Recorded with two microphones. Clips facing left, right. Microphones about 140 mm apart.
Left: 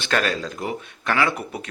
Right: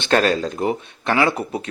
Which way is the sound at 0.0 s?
30° right (ahead or behind).